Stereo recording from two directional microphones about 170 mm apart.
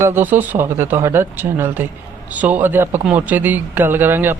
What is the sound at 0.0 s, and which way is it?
Speech, 10° right (ahead or behind).